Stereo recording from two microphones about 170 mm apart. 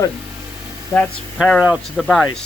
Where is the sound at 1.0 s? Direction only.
Centre (ahead or behind).